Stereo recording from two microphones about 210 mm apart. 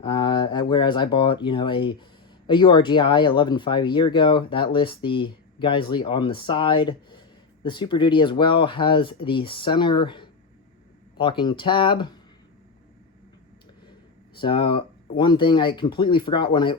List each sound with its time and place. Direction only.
0.0 s speech: 20° left (ahead or behind)
14.4 s speech: 25° left (ahead or behind)